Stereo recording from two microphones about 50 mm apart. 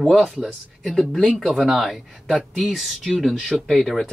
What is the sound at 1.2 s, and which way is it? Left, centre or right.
Speech, centre.